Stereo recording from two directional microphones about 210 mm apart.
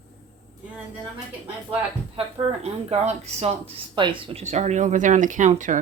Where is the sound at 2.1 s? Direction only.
30° right (ahead or behind).